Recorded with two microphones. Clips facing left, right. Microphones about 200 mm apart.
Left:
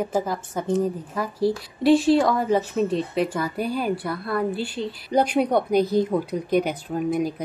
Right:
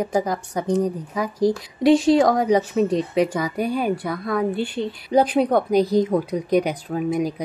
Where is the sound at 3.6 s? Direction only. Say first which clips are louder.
Right 3 dB; 45° right (ahead or behind).